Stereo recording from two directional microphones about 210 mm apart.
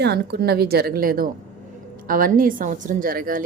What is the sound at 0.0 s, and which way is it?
A woman's voice, 50° right (ahead or behind).